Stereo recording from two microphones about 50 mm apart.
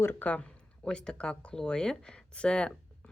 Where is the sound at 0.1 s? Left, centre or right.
Left.